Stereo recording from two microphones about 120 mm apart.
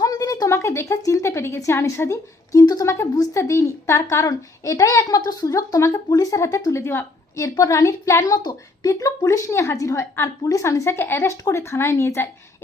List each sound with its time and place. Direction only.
0.0 s speech: 30° left (ahead or behind)